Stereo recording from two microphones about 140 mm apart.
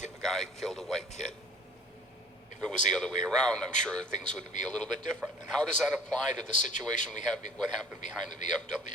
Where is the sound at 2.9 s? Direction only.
5° left (ahead or behind).